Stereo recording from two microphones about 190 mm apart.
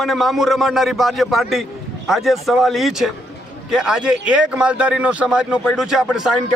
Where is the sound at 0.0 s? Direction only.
Centre (ahead or behind).